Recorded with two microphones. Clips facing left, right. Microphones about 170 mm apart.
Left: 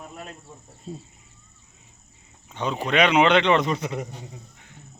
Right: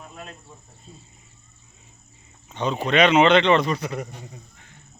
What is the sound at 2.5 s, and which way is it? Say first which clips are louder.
A man's voice: right 2 dB; 10° left (ahead or behind).